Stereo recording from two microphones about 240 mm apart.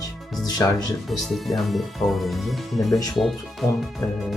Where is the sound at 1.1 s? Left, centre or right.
Centre.